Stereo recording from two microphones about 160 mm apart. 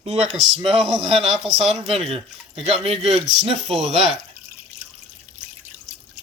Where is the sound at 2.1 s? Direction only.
40° right (ahead or behind).